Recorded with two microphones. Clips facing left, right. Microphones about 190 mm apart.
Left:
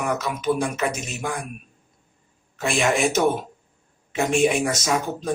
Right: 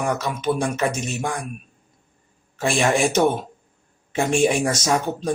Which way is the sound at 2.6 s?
30° right (ahead or behind).